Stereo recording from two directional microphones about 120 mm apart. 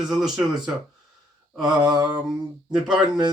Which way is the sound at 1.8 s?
35° right (ahead or behind).